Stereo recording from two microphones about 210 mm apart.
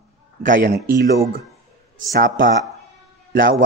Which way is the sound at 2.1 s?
40° right (ahead or behind).